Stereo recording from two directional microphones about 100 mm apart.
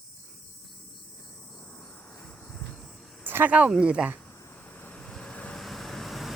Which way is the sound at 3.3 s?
20° right (ahead or behind).